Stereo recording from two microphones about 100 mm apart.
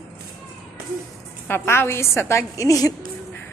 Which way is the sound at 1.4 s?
25° left (ahead or behind).